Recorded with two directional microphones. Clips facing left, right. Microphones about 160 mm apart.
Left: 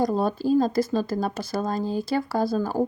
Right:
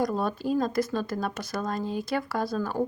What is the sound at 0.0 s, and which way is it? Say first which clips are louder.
Speech: left 4 dB; 30° left (ahead or behind).